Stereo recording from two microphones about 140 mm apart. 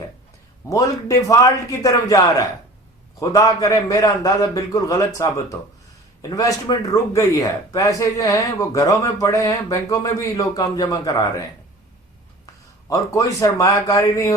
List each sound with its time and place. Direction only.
0.7 s a man's voice: 25° left (ahead or behind)
12.9 s a man's voice: 25° left (ahead or behind)